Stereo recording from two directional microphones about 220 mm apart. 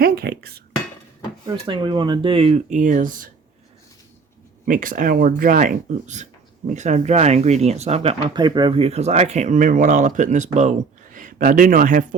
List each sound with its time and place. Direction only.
0.0 s dishes: 45° right (ahead or behind)
1.5 s speech: 20° right (ahead or behind); by 3.2 s 40° right (ahead or behind)
4.6 s speech: 35° right (ahead or behind)